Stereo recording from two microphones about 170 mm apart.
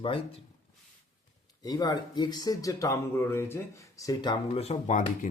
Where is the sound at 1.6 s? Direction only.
20° left (ahead or behind).